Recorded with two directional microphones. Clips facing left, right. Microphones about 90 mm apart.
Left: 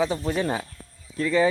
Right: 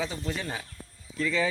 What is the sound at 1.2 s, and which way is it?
Speech, 45° left (ahead or behind).